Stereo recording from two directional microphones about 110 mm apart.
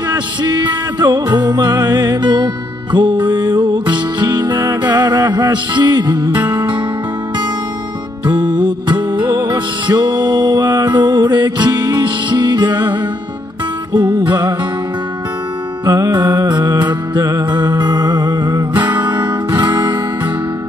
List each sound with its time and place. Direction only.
0.1 s music: 40° right (ahead or behind)
8.3 s music: 40° right (ahead or behind)
15.8 s music: 35° right (ahead or behind)